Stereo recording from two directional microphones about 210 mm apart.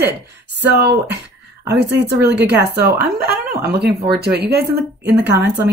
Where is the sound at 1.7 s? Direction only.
55° right (ahead or behind).